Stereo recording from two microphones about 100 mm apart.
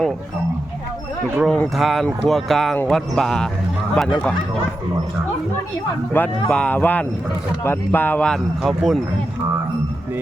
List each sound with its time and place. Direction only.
1.5 s speech: centre (ahead or behind)
6.2 s speech: 20° left (ahead or behind)
8.3 s speech: centre (ahead or behind)